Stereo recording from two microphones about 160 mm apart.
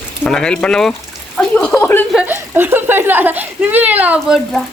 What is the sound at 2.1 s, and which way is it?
A child's voice, 10° right (ahead or behind).